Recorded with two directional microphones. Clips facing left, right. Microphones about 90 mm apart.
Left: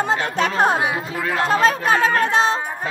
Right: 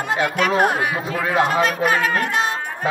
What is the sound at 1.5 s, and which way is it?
A woman's voice, 35° left (ahead or behind).